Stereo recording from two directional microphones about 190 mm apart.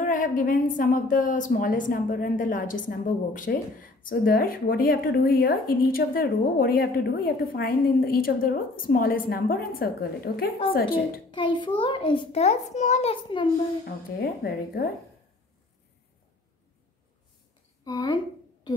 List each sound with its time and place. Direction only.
0.0 s speech: 45° left (ahead or behind)
11.3 s a child's voice: 25° left (ahead or behind)
14.2 s speech: 50° left (ahead or behind)
17.8 s speech: 20° left (ahead or behind)